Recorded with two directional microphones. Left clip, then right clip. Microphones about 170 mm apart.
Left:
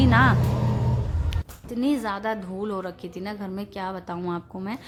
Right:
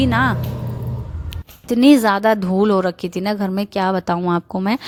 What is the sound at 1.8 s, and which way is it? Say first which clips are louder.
A woman's voice: right 13 dB; 55° right (ahead or behind).